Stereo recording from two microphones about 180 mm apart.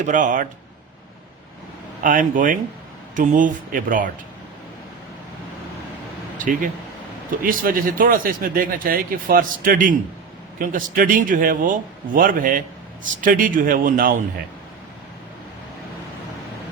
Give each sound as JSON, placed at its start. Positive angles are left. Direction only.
{"t": 0.0, "sound": "a man's voice", "side_deg": -45}
{"t": 2.0, "sound": "a man's voice", "side_deg": -50}
{"t": 6.3, "sound": "a man's voice", "side_deg": -45}